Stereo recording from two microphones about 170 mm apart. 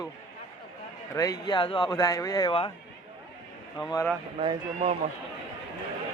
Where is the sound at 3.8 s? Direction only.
25° left (ahead or behind).